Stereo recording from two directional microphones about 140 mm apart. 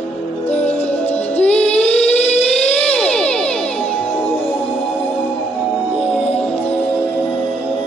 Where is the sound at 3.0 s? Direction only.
5° left (ahead or behind).